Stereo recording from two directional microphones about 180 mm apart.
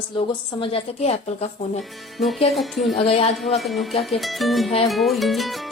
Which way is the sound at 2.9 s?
35° left (ahead or behind).